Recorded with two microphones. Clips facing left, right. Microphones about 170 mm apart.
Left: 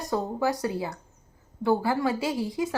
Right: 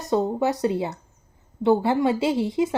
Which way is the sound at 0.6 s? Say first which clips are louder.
Right 6 dB; 25° right (ahead or behind).